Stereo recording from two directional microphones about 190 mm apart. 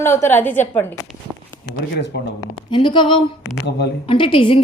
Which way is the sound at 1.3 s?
5° right (ahead or behind).